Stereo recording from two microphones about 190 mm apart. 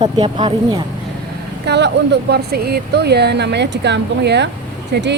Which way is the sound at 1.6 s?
65° right (ahead or behind).